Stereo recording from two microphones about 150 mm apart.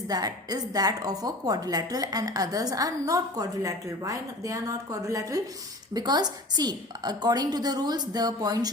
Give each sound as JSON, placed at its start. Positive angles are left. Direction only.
{"t": 0.1, "sound": "a woman's voice", "side_deg": -25}